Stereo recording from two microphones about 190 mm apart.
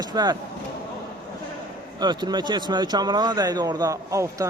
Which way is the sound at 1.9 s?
25° right (ahead or behind).